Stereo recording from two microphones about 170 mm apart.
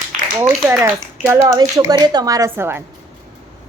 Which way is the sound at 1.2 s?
15° right (ahead or behind).